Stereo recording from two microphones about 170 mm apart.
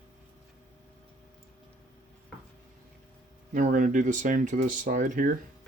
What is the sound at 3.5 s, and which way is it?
Speech, 50° right (ahead or behind).